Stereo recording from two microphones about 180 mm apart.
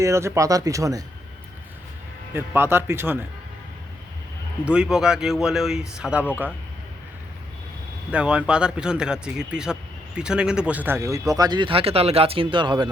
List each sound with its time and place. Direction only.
0.0 s speech: 15° right (ahead or behind)
2.3 s speech: 10° right (ahead or behind)
4.6 s speech: 5° right (ahead or behind)
8.1 s speech: 5° right (ahead or behind); by 12.9 s 25° right (ahead or behind)